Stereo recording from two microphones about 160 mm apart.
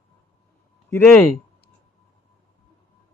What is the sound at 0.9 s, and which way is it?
Speech, 15° left (ahead or behind).